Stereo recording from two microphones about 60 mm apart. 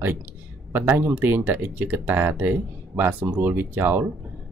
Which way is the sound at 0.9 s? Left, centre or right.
Right.